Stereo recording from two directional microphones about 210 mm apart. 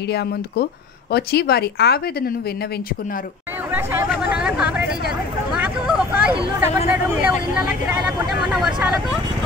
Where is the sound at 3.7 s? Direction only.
10° right (ahead or behind).